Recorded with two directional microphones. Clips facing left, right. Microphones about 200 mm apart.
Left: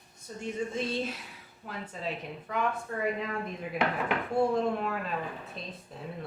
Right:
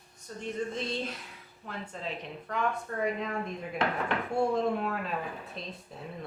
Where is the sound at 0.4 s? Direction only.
5° left (ahead or behind).